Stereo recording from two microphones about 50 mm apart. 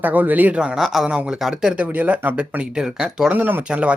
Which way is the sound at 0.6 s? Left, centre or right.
Centre.